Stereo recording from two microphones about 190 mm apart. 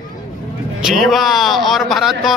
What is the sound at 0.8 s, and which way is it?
A man's voice, centre (ahead or behind).